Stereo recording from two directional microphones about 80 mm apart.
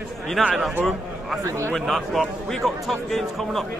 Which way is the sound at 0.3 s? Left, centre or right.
Centre.